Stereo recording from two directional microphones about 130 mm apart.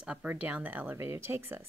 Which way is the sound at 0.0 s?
10° right (ahead or behind).